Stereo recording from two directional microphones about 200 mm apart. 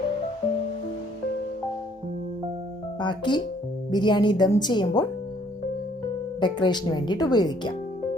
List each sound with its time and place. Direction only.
3.0 s speech: 25° left (ahead or behind)
6.4 s speech: 20° left (ahead or behind)